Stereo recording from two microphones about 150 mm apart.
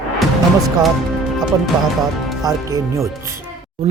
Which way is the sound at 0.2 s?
Centre (ahead or behind).